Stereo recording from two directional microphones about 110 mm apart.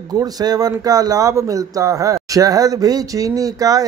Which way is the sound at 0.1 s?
35° right (ahead or behind).